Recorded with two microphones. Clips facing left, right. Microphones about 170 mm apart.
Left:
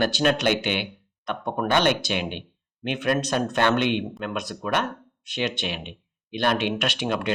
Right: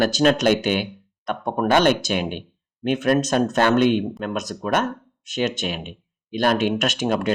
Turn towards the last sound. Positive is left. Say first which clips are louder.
# right 4 dB
turn(degrees=-45)  # may be behind; listen again after turning